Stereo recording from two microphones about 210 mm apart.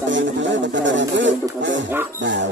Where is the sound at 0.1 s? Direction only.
60° right (ahead or behind).